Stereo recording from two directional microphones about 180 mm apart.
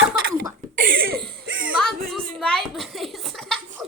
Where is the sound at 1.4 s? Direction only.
90° right.